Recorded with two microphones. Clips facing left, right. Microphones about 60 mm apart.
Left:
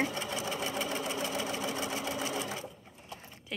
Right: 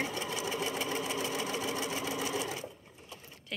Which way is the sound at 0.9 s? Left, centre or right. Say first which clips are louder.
Even; left.